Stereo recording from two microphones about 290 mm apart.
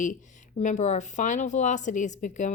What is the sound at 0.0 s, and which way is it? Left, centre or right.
Speech, left.